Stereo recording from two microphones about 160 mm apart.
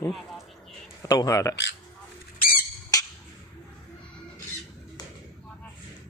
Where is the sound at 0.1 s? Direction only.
Centre (ahead or behind).